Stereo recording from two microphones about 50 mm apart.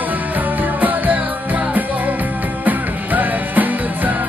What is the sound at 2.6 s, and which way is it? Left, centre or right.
Music, right.